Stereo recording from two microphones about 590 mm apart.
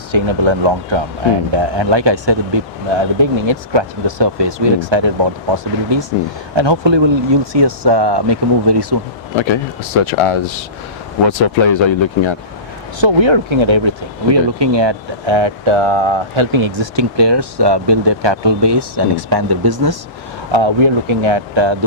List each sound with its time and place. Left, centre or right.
0.1 s speech: right
9.4 s speech: left
13.0 s speech: right
20.5 s speech: right